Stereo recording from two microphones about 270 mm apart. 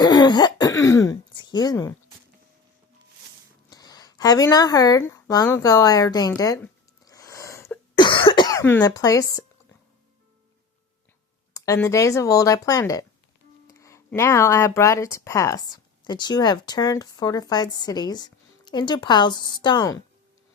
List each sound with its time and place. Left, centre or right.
0.0 s throat clearing: centre
0.8 s speech: centre
3.7 s speech: centre
11.5 s speech: centre